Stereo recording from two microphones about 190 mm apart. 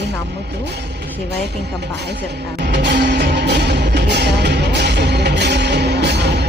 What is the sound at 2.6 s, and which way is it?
Music, 60° right (ahead or behind).